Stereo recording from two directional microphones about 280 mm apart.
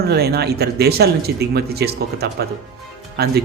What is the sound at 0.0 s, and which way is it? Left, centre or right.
Speech, right.